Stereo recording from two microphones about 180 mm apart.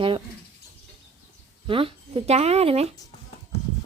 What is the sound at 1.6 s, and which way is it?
Speech, 30° right (ahead or behind).